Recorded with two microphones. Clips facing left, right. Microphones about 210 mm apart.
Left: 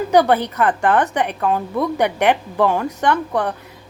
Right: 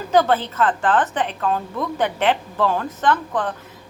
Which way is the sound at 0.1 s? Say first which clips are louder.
Left 2 dB; 15° left (ahead or behind).